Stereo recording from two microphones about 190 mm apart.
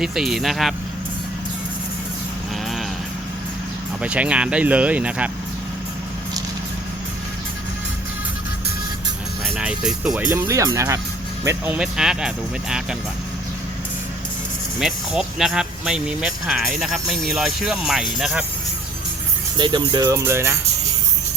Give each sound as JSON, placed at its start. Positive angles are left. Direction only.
{"t": 0.0, "sound": "speech", "side_deg": 0}
{"t": 4.0, "sound": "speech", "side_deg": -5}
{"t": 9.6, "sound": "speech", "side_deg": -5}
{"t": 10.2, "sound": "speech", "side_deg": -15}
{"t": 14.8, "sound": "speech", "side_deg": -5}
{"t": 19.5, "sound": "speech", "side_deg": -25}